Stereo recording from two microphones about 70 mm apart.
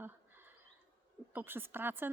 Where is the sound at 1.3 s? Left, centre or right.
Right.